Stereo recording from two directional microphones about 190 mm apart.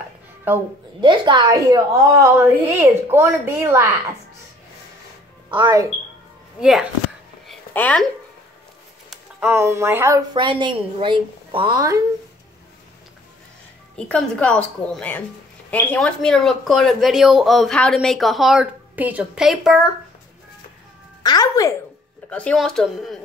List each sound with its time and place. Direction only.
1.0 s a woman's voice: 25° right (ahead or behind)
5.5 s speech: 20° right (ahead or behind)
6.6 s speech: 5° right (ahead or behind)
7.4 s a sound: 5° left (ahead or behind)
9.1 s a woman's voice: 10° right (ahead or behind)
13.9 s speech: 5° left (ahead or behind)
21.2 s speech: 20° left (ahead or behind)
22.3 s speech: 5° left (ahead or behind)